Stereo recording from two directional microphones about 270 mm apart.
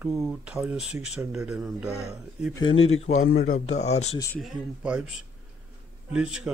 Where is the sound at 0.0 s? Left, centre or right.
Centre.